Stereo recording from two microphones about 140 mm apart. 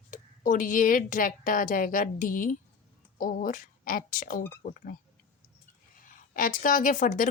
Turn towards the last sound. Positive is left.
turn(degrees=70)  # may be behind; listen again after turning